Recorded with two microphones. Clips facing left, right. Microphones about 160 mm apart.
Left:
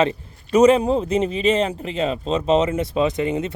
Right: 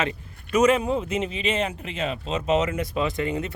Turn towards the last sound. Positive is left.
turn(degrees=20)  # may be behind; listen again after turning